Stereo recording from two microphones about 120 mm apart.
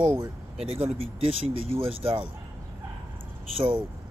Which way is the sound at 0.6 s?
55° right (ahead or behind).